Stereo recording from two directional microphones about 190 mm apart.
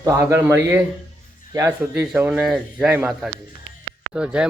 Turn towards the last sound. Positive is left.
turn(degrees=-5)  # may be behind; listen again after turning